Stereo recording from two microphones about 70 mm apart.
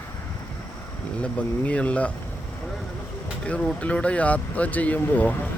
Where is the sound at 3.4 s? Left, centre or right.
Centre.